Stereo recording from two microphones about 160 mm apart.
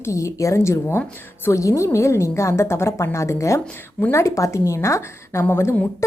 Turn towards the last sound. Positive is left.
turn(degrees=15)  # may be behind; listen again after turning